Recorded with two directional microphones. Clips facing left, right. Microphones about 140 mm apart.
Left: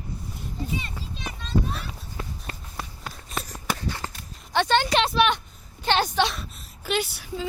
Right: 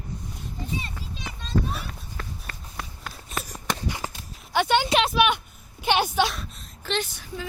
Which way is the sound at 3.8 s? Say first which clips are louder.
Right 1 dB; 15° right (ahead or behind).